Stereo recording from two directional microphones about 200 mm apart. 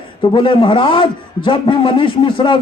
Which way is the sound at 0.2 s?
25° left (ahead or behind).